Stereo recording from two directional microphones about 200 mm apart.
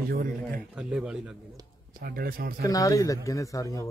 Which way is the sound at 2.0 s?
50° right (ahead or behind).